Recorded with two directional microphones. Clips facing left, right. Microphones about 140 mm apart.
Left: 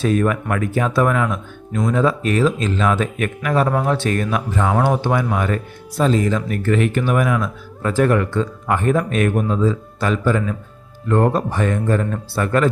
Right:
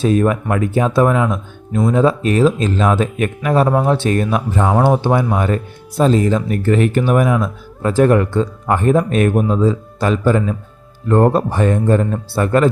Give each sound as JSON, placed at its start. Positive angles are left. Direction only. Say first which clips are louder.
{"t": 0.0, "sound": "speech", "louder": "right 3 dB", "side_deg": -30}